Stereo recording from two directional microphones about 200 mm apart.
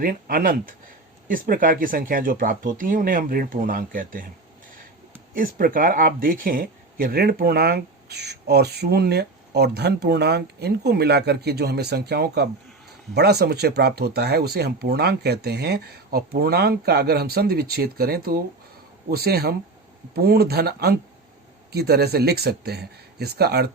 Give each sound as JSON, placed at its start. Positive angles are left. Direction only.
{"t": 0.0, "sound": "speech", "side_deg": -45}
{"t": 5.3, "sound": "speech", "side_deg": -45}